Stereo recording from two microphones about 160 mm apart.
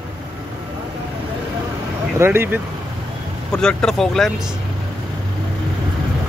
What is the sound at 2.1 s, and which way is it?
Speech, 15° right (ahead or behind).